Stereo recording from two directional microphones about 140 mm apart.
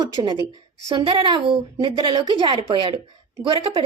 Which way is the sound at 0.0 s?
30° right (ahead or behind).